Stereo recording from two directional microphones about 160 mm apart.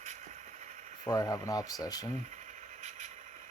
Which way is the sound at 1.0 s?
25° left (ahead or behind).